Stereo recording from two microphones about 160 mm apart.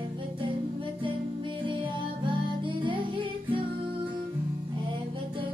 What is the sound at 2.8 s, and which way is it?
Music, 30° right (ahead or behind).